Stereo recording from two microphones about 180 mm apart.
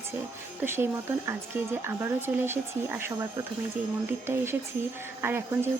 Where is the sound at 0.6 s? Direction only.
15° right (ahead or behind).